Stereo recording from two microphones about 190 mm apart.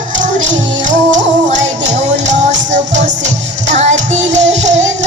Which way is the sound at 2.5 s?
40° right (ahead or behind).